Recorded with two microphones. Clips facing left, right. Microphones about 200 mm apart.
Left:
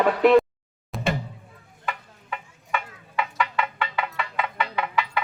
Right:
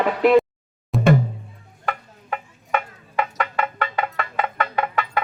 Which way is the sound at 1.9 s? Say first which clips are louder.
Right 5 dB; 45° right (ahead or behind).